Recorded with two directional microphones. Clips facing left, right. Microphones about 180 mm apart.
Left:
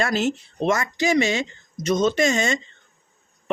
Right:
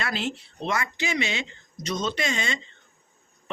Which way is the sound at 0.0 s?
45° left (ahead or behind).